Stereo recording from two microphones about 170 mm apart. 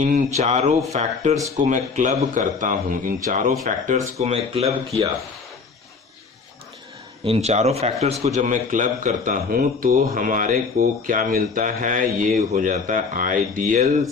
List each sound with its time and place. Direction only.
0.0 s speech: 45° right (ahead or behind)
7.3 s speech: 40° right (ahead or behind)